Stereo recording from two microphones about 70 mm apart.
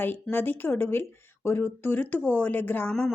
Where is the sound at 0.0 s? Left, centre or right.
Left.